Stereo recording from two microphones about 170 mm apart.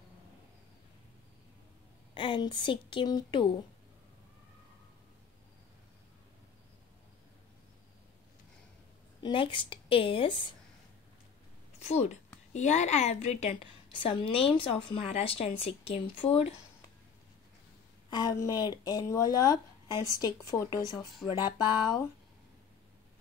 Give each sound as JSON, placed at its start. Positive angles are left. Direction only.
{"t": 2.1, "sound": "speech", "side_deg": 30}
{"t": 9.2, "sound": "a woman's voice", "side_deg": 30}
{"t": 11.8, "sound": "a woman's voice", "side_deg": 40}
{"t": 18.1, "sound": "speech", "side_deg": 25}